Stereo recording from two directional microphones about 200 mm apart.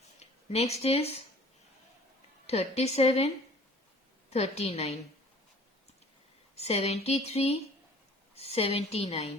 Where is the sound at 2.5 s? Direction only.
30° left (ahead or behind).